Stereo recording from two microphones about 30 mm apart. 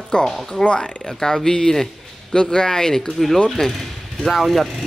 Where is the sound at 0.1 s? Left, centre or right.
Left; by 3.7 s centre.